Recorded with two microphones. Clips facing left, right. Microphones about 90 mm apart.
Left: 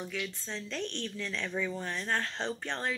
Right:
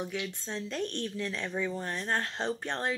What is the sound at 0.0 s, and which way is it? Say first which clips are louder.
Speech: right 2 dB; 15° right (ahead or behind).